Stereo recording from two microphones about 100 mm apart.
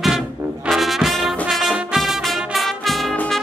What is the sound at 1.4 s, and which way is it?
Music, 5° right (ahead or behind).